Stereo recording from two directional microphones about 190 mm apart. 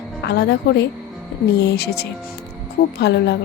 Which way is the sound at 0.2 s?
60° left (ahead or behind).